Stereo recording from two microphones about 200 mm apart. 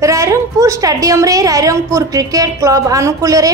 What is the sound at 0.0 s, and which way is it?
A woman's voice, 15° right (ahead or behind).